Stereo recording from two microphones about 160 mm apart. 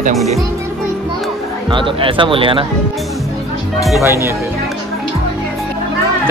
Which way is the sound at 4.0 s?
15° right (ahead or behind).